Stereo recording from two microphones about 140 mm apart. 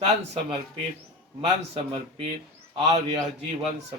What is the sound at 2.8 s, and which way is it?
Speech, 50° right (ahead or behind).